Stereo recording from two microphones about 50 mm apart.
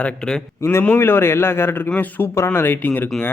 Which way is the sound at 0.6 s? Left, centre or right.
Left.